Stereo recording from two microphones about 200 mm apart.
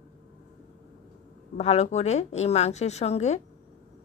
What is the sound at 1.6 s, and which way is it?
A woman's voice, 35° left (ahead or behind).